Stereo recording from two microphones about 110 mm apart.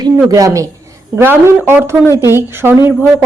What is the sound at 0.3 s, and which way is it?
Speech, 30° right (ahead or behind).